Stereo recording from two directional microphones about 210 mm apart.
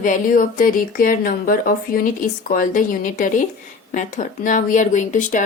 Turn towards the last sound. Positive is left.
turn(degrees=35)  # may be behind; listen again after turning